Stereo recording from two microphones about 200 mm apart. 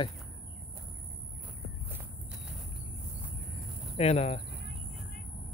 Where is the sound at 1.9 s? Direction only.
10° right (ahead or behind).